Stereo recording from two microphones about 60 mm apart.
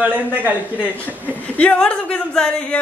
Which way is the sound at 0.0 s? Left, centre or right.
Right.